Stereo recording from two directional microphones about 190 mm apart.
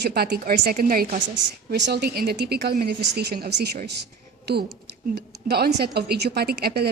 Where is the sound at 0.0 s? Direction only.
55° right (ahead or behind).